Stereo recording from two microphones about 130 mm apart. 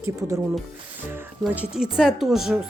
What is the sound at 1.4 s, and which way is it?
Speech, 10° right (ahead or behind).